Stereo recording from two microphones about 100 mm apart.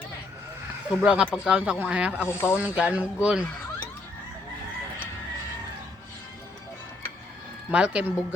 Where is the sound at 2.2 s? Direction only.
25° left (ahead or behind).